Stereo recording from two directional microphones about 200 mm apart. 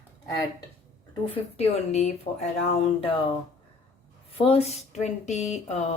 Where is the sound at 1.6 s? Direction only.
35° left (ahead or behind).